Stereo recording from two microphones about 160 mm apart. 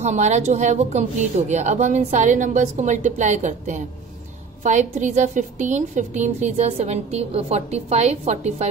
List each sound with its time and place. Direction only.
0.0 s a woman's voice: 45° right (ahead or behind)